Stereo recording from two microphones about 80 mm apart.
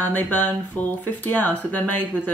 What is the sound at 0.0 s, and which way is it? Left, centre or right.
Speech, left.